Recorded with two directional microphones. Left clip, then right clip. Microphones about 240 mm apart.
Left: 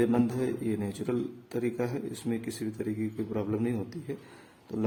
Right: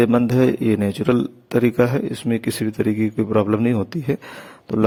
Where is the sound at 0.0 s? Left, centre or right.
Right.